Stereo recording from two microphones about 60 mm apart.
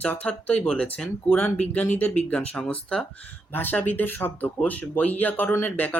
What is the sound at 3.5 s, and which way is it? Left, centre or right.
Speech, left.